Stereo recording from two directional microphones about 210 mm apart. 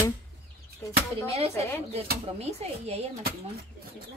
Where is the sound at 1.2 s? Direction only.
30° right (ahead or behind).